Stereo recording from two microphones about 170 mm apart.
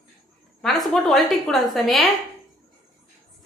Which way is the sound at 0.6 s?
Centre (ahead or behind).